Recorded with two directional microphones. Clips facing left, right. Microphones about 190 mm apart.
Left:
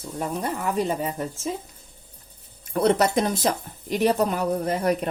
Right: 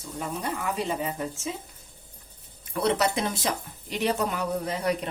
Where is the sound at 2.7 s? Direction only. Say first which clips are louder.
Left 5 dB; 45° left (ahead or behind).